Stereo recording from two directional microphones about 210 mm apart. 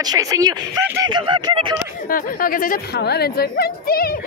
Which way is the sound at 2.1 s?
45° left (ahead or behind).